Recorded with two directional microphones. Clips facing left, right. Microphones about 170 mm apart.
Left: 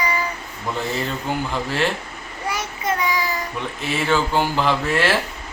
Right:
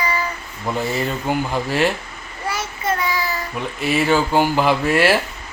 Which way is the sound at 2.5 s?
15° left (ahead or behind).